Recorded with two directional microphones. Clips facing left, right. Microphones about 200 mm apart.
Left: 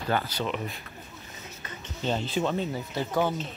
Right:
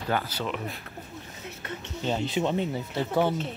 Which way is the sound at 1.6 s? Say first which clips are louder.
Right 7 dB; 65° right (ahead or behind).